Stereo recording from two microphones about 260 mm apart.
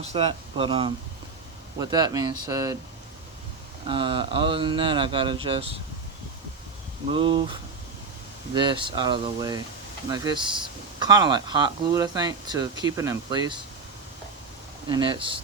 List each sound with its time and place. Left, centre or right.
0.0 s speech: right
3.8 s speech: centre
7.1 s speech: centre
8.5 s speech: centre
14.8 s speech: centre